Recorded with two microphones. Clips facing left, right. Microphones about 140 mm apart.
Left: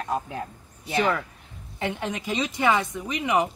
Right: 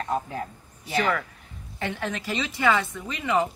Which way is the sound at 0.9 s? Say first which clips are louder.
Left 1 dB; 15° left (ahead or behind).